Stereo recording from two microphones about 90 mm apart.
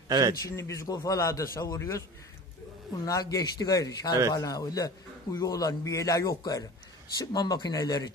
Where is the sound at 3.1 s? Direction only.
40° left (ahead or behind).